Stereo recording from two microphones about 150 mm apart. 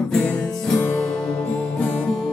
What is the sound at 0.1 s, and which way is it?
Music, 5° left (ahead or behind).